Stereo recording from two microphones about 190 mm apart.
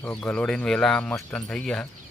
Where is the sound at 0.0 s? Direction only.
5° left (ahead or behind).